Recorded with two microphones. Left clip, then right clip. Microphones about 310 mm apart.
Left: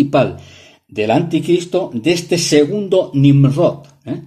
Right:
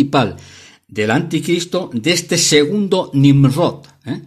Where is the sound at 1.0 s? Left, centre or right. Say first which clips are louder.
Left 2 dB; right.